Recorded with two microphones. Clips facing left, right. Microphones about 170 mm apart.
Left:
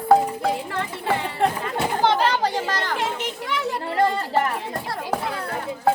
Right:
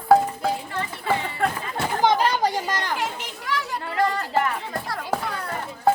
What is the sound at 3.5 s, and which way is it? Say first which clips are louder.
Children playing: even; 25° left (ahead or behind).